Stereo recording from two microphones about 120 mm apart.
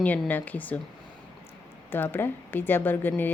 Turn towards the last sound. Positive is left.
turn(degrees=15)  # may be behind; listen again after turning